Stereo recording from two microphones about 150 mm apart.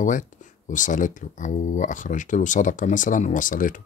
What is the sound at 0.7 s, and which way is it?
Speech, 60° left (ahead or behind).